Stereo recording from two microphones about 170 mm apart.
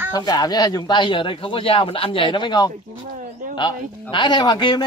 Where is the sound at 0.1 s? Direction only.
25° left (ahead or behind).